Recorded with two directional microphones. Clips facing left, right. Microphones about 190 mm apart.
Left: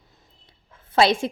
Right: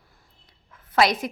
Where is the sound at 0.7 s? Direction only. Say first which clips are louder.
Left 2 dB; 30° left (ahead or behind).